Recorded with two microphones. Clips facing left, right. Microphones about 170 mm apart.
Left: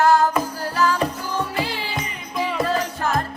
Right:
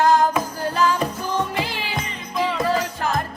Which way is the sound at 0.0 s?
20° right (ahead or behind).